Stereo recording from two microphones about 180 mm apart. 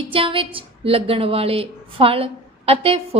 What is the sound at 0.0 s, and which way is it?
A woman's voice, 30° right (ahead or behind).